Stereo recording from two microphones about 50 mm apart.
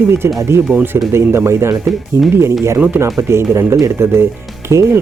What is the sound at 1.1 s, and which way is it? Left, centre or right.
Speech, right.